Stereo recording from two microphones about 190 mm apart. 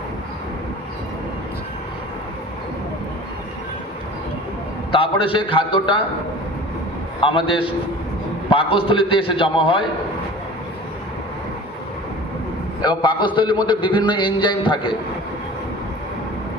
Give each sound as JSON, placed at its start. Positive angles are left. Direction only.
{"t": 4.9, "sound": "a man's voice", "side_deg": 30}
{"t": 7.2, "sound": "a man's voice", "side_deg": 25}
{"t": 12.8, "sound": "a man's voice", "side_deg": 25}